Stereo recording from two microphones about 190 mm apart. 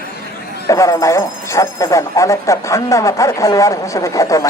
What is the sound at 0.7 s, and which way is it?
Speech, 15° left (ahead or behind).